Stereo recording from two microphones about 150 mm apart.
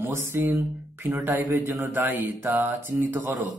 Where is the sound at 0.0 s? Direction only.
15° right (ahead or behind).